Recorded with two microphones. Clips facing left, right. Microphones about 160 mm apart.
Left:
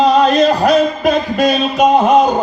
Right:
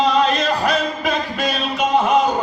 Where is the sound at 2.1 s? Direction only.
35° left (ahead or behind).